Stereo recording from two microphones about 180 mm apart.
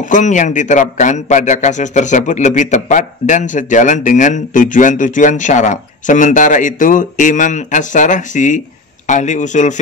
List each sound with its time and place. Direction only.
0.0 s a man's voice: 45° left (ahead or behind)